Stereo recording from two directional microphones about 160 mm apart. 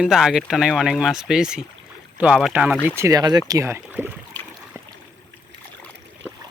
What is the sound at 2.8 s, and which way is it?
Speech, 15° right (ahead or behind).